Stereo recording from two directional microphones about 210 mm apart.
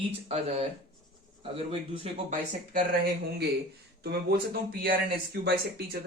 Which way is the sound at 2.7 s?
45° right (ahead or behind).